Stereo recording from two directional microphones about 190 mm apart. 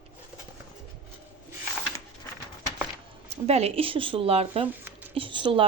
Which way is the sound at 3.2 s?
35° right (ahead or behind).